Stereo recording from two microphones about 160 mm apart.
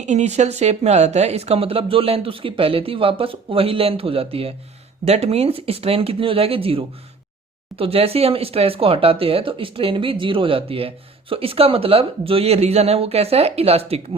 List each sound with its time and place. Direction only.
0.0 s speech: 45° right (ahead or behind)